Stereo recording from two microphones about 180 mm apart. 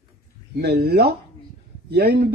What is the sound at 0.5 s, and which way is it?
Speech, 60° right (ahead or behind).